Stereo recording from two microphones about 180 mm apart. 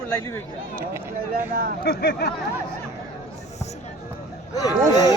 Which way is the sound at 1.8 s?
60° left (ahead or behind).